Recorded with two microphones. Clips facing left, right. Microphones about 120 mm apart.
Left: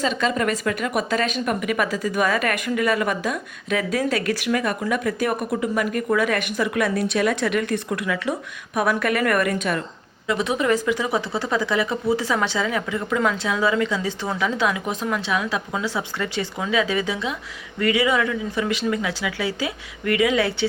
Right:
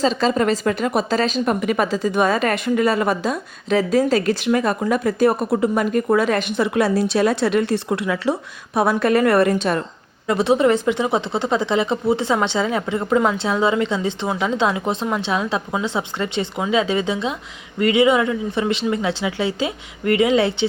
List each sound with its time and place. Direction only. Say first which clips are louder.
0.0 s speech: right 4 dB; 30° right (ahead or behind)